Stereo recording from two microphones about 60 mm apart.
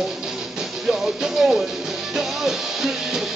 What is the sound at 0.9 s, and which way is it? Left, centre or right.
Music, centre.